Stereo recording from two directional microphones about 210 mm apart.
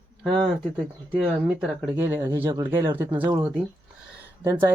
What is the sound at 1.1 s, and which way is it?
Speech, 5° right (ahead or behind).